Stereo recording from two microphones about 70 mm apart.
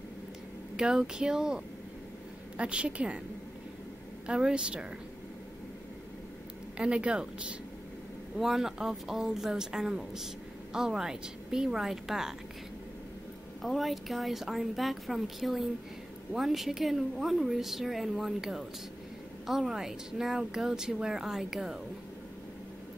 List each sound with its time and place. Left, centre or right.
0.7 s speech: centre
4.3 s speech: centre
6.8 s speech: centre
13.6 s a woman's voice: centre